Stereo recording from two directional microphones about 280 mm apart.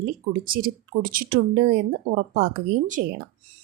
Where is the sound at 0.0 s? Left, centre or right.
Right.